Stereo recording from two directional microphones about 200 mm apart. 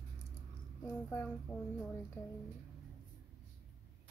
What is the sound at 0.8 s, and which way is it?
Speech, 10° left (ahead or behind).